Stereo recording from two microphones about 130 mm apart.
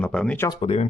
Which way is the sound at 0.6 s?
55° left (ahead or behind).